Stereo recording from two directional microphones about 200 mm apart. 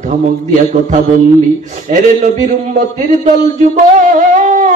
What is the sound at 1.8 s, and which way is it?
A man's voice, 35° right (ahead or behind).